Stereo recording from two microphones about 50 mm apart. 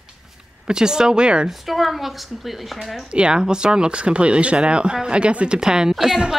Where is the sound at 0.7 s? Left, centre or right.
Centre.